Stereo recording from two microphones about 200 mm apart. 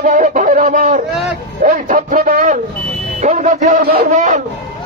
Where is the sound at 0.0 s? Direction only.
35° right (ahead or behind).